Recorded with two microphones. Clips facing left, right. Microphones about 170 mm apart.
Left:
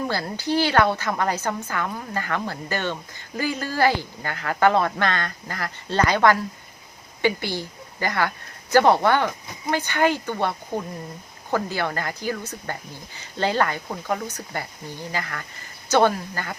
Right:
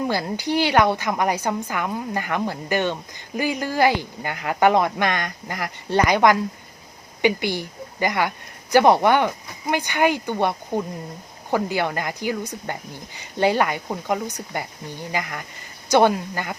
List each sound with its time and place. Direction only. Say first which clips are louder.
0.1 s a woman's voice: right 2 dB; 15° right (ahead or behind)